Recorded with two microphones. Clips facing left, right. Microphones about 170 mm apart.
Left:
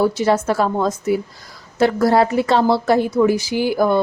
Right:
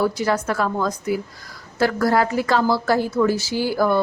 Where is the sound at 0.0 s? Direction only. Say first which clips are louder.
Left 4 dB; 25° left (ahead or behind).